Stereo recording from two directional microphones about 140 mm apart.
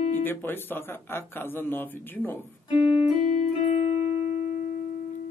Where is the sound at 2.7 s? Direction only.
40° left (ahead or behind).